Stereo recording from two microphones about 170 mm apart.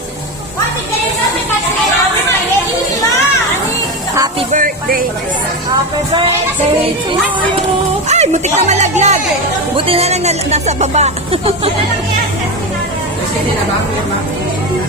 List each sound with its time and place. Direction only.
4.5 s speech: 55° right (ahead or behind)
8.1 s speech: 45° right (ahead or behind)